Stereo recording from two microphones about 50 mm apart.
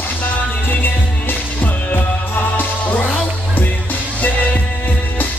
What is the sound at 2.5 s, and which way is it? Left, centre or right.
Music, left.